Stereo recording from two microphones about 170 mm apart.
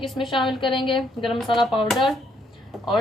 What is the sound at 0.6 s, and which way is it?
Speech, 30° left (ahead or behind).